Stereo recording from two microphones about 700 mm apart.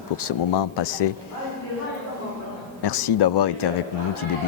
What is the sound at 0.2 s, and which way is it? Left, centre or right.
Speech, left.